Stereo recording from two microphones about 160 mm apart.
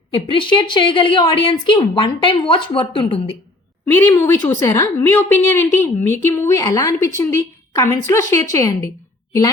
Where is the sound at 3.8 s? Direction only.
20° left (ahead or behind).